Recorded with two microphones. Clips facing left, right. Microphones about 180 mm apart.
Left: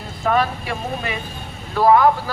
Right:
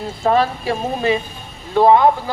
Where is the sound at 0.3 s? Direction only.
30° right (ahead or behind).